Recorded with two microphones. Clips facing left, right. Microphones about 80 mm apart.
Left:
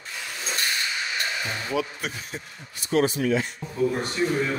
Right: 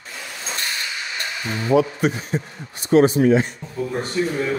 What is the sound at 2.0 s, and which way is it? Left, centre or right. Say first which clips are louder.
A man's voice: right 12 dB; right.